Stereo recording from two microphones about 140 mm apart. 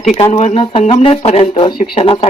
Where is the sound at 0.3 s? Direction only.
55° left (ahead or behind).